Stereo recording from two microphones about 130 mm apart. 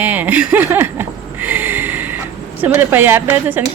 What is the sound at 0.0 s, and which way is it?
Speech, 15° right (ahead or behind).